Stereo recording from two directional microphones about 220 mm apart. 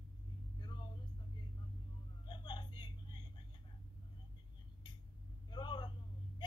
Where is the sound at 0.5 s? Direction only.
20° left (ahead or behind).